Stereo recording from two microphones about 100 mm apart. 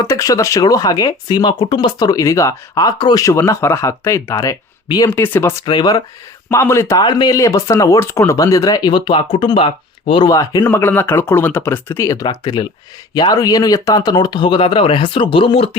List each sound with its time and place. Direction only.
0.0 s speech: 35° left (ahead or behind)
5.1 s speech: 25° left (ahead or behind)
5.6 s speech: 45° left (ahead or behind)
6.5 s speech: 30° left (ahead or behind)
7.0 s speech: 45° left (ahead or behind)
7.3 s speech: 30° left (ahead or behind); by 9.6 s 60° left (ahead or behind)
10.2 s speech: 35° left (ahead or behind)
10.7 s speech: 20° left (ahead or behind)
12.0 s speech: 40° left (ahead or behind); by 15.8 s 75° left (ahead or behind)